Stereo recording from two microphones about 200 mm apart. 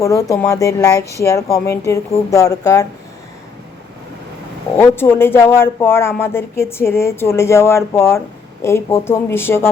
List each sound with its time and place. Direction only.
0.0 s speech: 15° left (ahead or behind)
4.8 s speech: 10° left (ahead or behind)